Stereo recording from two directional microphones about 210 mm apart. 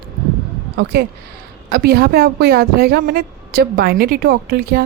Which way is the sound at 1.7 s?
50° right (ahead or behind).